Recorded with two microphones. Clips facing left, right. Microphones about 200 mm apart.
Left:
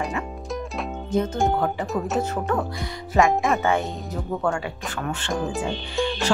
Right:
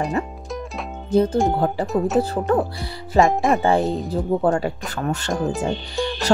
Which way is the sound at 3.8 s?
Centre (ahead or behind).